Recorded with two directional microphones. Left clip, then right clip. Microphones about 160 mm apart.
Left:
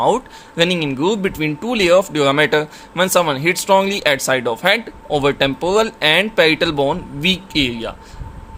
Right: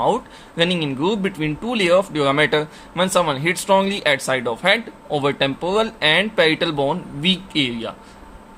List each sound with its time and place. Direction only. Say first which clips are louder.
0.0 s speech: left 3 dB; 25° left (ahead or behind)